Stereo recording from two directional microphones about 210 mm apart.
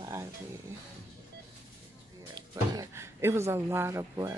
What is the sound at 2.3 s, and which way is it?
Speech, 15° right (ahead or behind).